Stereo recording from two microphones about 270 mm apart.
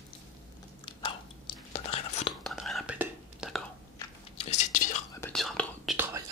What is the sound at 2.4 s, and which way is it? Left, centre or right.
Whispering, centre.